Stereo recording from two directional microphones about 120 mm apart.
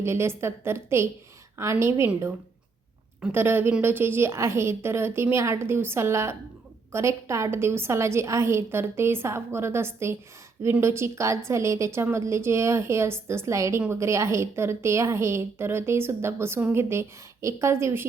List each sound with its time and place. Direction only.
0.0 s a woman's voice: 20° right (ahead or behind)
3.2 s a woman's voice: 20° right (ahead or behind)